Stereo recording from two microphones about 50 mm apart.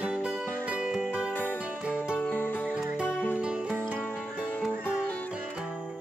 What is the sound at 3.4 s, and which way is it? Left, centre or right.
Music, centre.